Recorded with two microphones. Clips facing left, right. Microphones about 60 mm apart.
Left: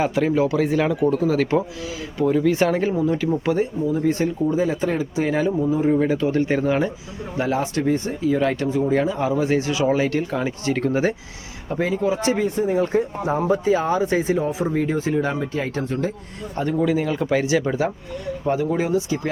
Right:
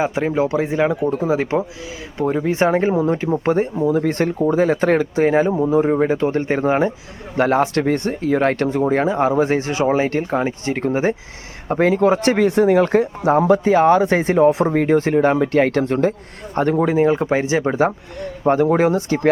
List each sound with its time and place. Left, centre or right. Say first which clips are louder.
0.0 s speech: right 1 dB; right
3.8 s speech: right 3 dB; right
5.2 s speech: right 6 dB; right
5.5 s speech: right 4 dB; right
5.9 s speech: right 2 dB; right
7.3 s speech: right 6 dB; right
11.7 s speech: right 7 dB; right
16.9 s speech: right 5 dB; right
18.4 s speech: right 7 dB; right